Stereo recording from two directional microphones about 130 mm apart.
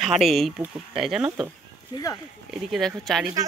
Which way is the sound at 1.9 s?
35° left (ahead or behind).